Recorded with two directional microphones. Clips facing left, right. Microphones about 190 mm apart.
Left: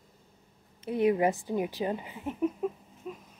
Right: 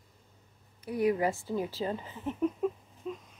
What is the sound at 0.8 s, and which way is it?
A woman's voice, 25° left (ahead or behind).